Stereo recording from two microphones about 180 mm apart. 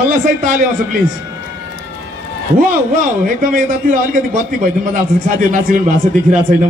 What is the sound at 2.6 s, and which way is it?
A man's voice, 50° right (ahead or behind).